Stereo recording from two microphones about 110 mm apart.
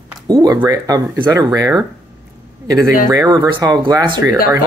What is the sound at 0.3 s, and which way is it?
A child's voice, 40° right (ahead or behind).